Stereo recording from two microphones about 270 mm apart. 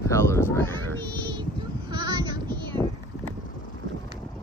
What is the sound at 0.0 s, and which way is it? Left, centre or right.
Honk, centre.